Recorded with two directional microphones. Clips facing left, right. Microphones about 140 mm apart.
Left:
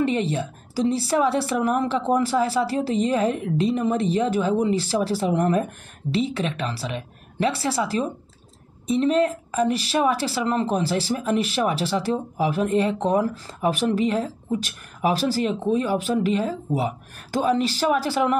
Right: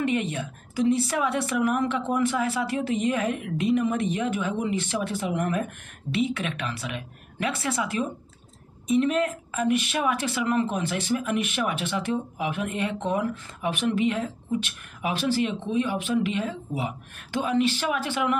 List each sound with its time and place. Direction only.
0.0 s a woman's voice: 30° left (ahead or behind)